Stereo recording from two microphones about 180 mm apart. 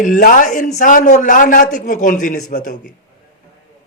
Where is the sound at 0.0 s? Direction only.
50° left (ahead or behind).